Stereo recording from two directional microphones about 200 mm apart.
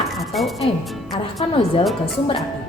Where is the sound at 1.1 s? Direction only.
25° left (ahead or behind).